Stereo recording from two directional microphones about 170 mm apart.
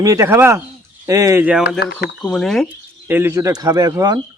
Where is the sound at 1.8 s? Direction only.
90° left.